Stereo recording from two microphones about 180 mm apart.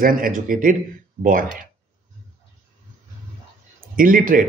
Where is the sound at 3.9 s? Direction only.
50° right (ahead or behind).